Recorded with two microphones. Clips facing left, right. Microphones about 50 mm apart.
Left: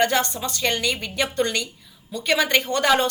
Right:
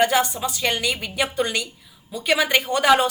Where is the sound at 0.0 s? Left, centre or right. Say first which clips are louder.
Right 2 dB; centre.